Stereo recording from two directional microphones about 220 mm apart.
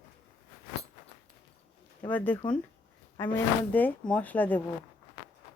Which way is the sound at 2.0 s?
5° left (ahead or behind).